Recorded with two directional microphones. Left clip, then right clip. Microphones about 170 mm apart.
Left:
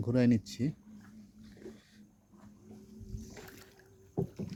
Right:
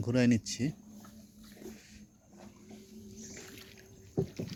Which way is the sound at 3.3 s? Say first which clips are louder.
Even; 45° left (ahead or behind).